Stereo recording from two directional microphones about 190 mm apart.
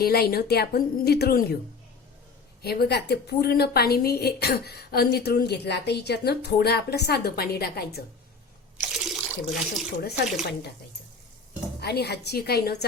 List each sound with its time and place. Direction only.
0.0 s a woman's voice: 55° left (ahead or behind)
2.6 s a woman's voice: 55° left (ahead or behind)
8.8 s water: centre (ahead or behind)
11.8 s a woman's voice: 60° left (ahead or behind)